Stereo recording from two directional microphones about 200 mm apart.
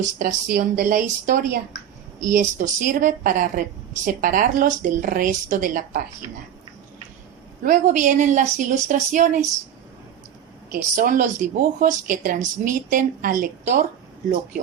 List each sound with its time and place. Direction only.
0.0 s speech: 40° right (ahead or behind)
7.6 s a woman's voice: 40° right (ahead or behind)
10.9 s speech: 40° right (ahead or behind)